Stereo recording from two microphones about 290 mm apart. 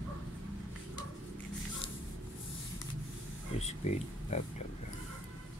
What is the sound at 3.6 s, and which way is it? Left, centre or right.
Speech, left.